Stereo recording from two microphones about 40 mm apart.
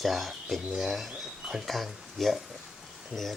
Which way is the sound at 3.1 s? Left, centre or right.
Right.